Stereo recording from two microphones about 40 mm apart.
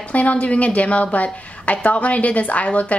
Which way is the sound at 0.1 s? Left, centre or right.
Left.